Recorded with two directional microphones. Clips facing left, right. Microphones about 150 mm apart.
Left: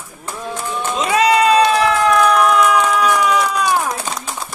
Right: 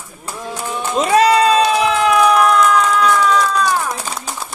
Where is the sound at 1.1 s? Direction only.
35° right (ahead or behind).